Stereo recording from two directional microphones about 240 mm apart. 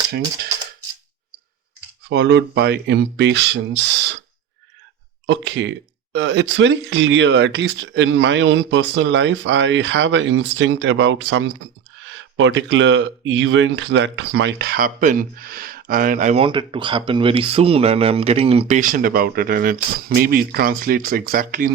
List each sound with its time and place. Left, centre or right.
2.0 s speech: right
5.2 s speech: right